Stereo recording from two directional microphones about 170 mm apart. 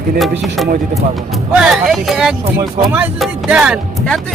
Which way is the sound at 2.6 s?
20° right (ahead or behind).